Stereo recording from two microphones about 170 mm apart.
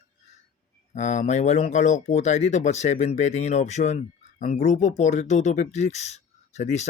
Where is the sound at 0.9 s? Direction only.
45° left (ahead or behind).